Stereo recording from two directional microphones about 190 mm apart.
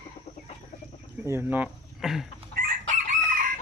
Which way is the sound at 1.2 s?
10° right (ahead or behind).